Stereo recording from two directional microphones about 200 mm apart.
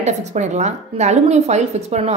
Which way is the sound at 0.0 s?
35° right (ahead or behind).